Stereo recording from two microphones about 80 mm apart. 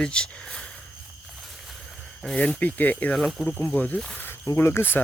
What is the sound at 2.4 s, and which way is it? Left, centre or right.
Speech, centre.